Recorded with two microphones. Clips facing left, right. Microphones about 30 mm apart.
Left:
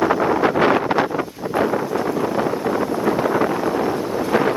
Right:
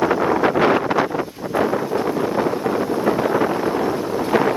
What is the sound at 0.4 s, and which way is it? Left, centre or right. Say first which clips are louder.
Wind noise: even; left.